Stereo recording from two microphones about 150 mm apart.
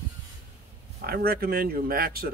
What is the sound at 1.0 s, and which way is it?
Speech, 90° right.